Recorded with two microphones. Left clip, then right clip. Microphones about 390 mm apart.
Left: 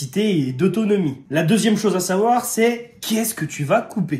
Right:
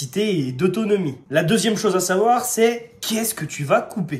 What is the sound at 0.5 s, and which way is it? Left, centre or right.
Speech, centre.